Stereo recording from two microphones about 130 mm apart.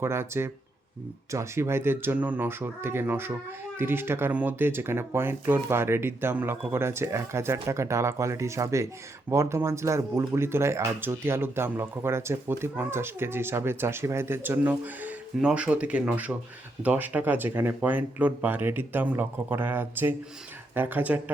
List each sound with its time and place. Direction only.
0.0 s speech: 20° right (ahead or behind)